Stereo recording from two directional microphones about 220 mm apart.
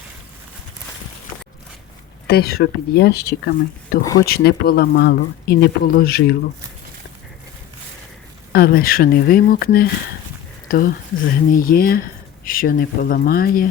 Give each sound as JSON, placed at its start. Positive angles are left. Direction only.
{"t": 2.2, "sound": "speech", "side_deg": 45}
{"t": 4.0, "sound": "speech", "side_deg": 15}
{"t": 4.3, "sound": "speech", "side_deg": 45}
{"t": 8.5, "sound": "speech", "side_deg": 45}